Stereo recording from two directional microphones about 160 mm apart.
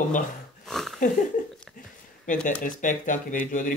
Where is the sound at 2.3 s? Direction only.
5° left (ahead or behind).